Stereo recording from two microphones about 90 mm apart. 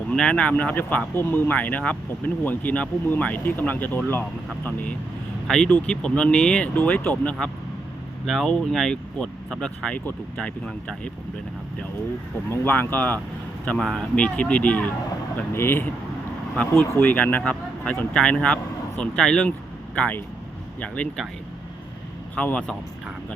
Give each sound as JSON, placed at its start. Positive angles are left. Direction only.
{"t": 0.1, "sound": "speech", "side_deg": 10}
{"t": 8.3, "sound": "speech", "side_deg": 5}
{"t": 12.5, "sound": "speech", "side_deg": 20}
{"t": 13.7, "sound": "speech", "side_deg": 10}
{"t": 17.0, "sound": "speech", "side_deg": 15}
{"t": 22.4, "sound": "speech", "side_deg": 15}